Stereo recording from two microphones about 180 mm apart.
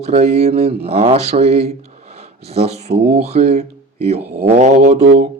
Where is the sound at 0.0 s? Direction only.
40° right (ahead or behind).